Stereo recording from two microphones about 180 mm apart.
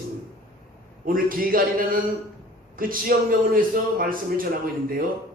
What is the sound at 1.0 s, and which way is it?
A man's voice, 50° right (ahead or behind).